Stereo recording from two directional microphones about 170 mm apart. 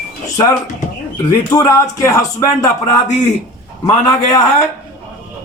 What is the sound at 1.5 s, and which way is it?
Speech, 20° left (ahead or behind).